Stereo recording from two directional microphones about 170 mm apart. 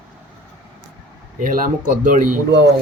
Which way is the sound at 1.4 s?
55° right (ahead or behind).